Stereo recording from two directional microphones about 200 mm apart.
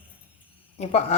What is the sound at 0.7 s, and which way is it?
Speech, 35° left (ahead or behind).